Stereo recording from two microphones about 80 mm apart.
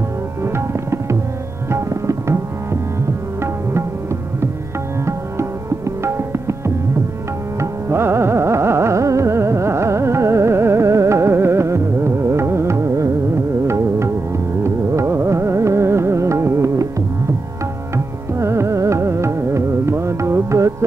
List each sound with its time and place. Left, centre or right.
0.4 s tabla: right
5.0 s tabla: right
7.9 s carnatic music: right
13.7 s music: right
17.9 s music: right